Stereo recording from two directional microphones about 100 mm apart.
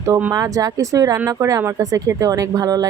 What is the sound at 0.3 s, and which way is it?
Speech, 35° right (ahead or behind).